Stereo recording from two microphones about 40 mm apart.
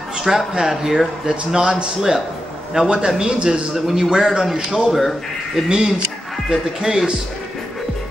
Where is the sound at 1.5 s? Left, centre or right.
Right.